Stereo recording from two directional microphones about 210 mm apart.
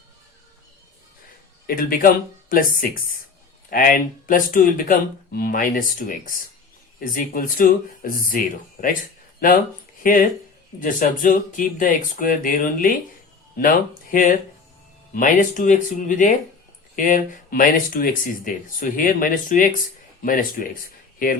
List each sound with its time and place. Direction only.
1.6 s speech: 45° left (ahead or behind)